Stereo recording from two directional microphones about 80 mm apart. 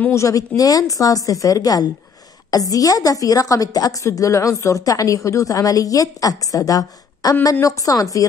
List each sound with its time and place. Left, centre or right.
0.1 s a woman's voice: left